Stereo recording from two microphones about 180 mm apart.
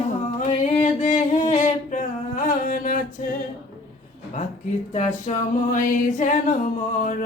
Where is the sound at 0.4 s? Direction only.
40° left (ahead or behind).